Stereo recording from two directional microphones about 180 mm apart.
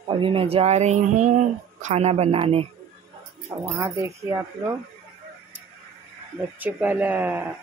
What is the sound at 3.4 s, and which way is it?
A man's voice, 15° right (ahead or behind).